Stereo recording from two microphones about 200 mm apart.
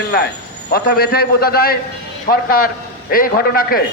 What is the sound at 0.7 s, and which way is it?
A man's voice, 50° left (ahead or behind).